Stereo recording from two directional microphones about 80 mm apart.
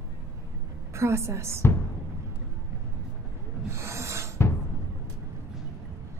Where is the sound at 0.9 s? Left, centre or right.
Right.